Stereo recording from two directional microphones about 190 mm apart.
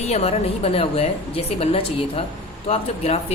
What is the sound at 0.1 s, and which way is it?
A woman's voice, 35° left (ahead or behind).